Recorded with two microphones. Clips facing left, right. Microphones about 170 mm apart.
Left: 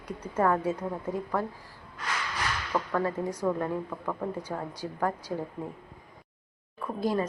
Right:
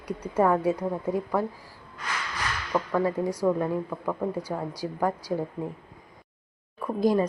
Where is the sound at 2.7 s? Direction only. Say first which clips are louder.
Right 4 dB; 10° right (ahead or behind).